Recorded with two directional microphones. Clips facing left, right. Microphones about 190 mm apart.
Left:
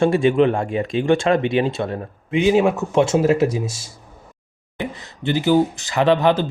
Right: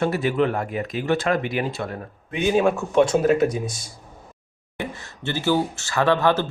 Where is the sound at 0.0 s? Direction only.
25° left (ahead or behind).